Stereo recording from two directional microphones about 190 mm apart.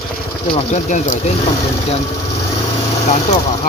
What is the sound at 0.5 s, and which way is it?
Speech, 40° left (ahead or behind).